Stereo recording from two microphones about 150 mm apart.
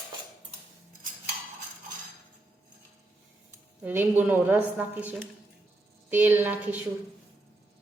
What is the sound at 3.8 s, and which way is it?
A woman's voice, 15° right (ahead or behind).